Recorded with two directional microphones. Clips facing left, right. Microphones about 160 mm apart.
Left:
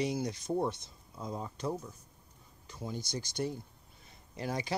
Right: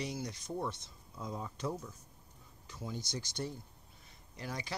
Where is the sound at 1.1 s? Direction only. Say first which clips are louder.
Left 2 dB; 15° left (ahead or behind).